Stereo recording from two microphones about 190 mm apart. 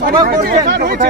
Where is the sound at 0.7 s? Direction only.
55° right (ahead or behind).